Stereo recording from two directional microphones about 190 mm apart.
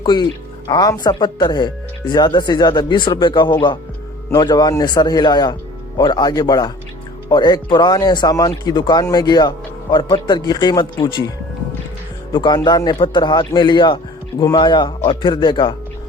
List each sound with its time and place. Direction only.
0.0 s speech: 25° left (ahead or behind)
12.3 s speech: 25° left (ahead or behind)